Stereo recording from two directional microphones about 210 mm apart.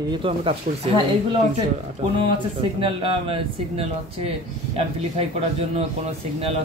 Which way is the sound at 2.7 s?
25° right (ahead or behind).